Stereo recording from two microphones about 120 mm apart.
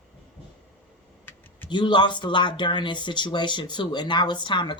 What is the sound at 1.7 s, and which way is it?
Speech, 40° left (ahead or behind).